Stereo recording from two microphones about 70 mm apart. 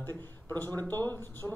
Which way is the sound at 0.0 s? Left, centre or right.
Left.